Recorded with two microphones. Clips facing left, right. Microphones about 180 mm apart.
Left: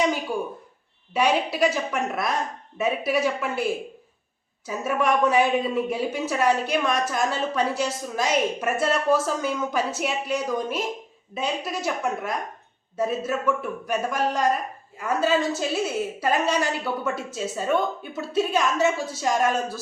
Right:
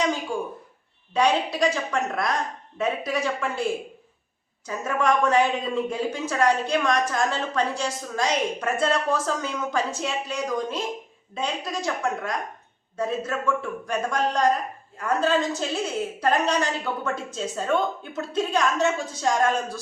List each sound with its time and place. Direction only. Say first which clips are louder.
1.1 s speech: even; 5° left (ahead or behind)
4.6 s speech: even; 10° left (ahead or behind)